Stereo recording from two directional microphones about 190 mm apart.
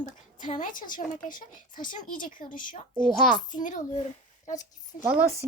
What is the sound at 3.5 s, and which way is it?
Speech, 40° left (ahead or behind).